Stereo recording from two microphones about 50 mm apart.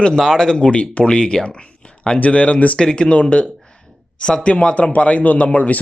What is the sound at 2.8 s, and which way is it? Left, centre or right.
A man's voice, centre.